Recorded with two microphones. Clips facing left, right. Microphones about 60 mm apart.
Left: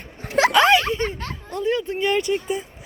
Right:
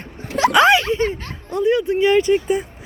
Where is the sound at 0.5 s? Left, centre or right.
Centre.